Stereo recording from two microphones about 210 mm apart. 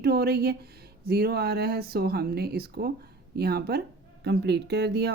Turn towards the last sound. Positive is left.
turn(degrees=-50)  # may be behind; listen again after turning